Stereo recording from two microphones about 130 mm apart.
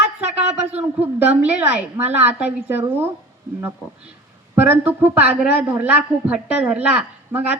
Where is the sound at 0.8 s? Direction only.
10° right (ahead or behind).